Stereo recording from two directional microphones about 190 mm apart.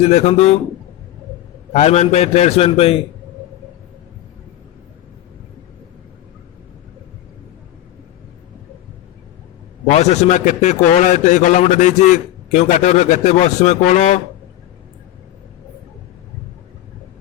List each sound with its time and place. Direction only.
0.0 s a man's voice: 35° left (ahead or behind)
1.7 s a man's voice: 35° left (ahead or behind)
10.0 s a man's voice: 35° left (ahead or behind)